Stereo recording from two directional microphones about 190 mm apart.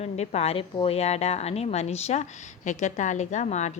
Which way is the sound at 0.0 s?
35° left (ahead or behind).